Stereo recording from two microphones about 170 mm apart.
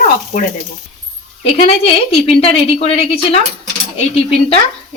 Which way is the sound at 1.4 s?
40° left (ahead or behind).